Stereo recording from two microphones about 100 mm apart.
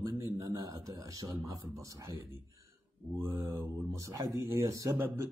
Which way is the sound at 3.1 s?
25° right (ahead or behind).